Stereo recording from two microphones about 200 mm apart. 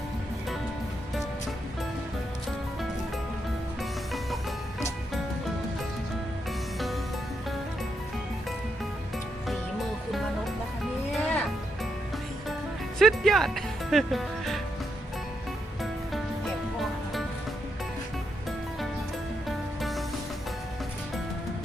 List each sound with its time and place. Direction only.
3.8 s music: centre (ahead or behind)
6.7 s music: centre (ahead or behind)
10.1 s music: centre (ahead or behind)
13.0 s music: centre (ahead or behind)
19.5 s music: centre (ahead or behind)